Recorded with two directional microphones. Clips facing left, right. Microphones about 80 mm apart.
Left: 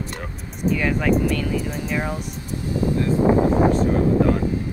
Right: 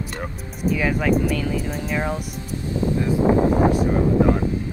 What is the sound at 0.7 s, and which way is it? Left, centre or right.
Speech, centre.